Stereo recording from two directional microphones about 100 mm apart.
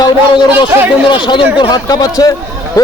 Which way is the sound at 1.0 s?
50° left (ahead or behind).